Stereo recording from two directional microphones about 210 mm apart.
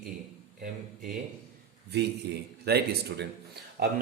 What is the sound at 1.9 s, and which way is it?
A man's voice, 50° right (ahead or behind).